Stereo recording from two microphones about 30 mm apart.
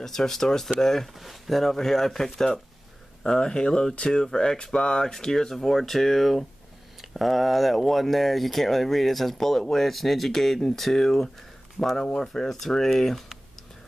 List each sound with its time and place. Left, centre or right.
0.0 s speech: centre
1.0 s speech: centre
3.3 s speech: left
5.0 s speech: centre
12.0 s speech: left
12.4 s speech: centre